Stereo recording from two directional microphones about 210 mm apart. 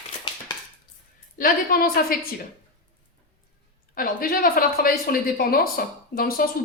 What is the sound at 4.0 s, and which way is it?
Speech, 45° left (ahead or behind).